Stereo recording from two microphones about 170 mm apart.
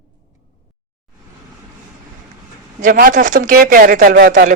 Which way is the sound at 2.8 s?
55° right (ahead or behind).